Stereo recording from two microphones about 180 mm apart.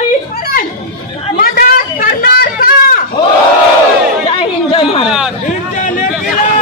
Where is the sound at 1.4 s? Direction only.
55° left (ahead or behind).